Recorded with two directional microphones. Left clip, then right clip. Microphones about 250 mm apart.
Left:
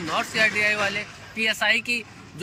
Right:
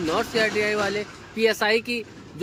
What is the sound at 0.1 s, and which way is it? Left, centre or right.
Speech, centre.